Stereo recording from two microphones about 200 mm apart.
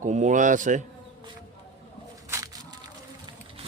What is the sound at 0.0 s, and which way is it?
Speech, 35° right (ahead or behind).